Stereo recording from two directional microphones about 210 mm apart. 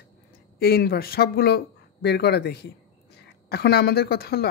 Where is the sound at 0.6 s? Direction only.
50° left (ahead or behind).